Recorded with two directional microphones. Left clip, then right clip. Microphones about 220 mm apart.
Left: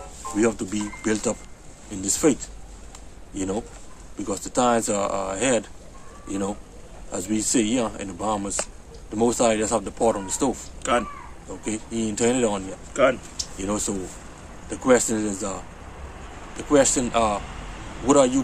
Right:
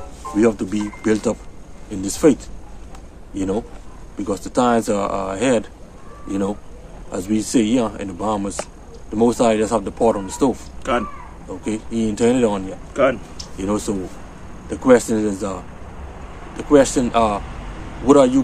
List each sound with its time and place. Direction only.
0.4 s speech: 15° right (ahead or behind)
7.1 s speech: 15° right (ahead or behind)
10.8 s speech: 20° left (ahead or behind)
11.6 s speech: 15° right (ahead or behind)
12.9 s speech: 15° left (ahead or behind)
13.6 s speech: 15° right (ahead or behind)